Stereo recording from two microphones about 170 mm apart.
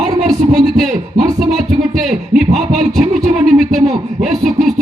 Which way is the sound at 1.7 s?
45° right (ahead or behind).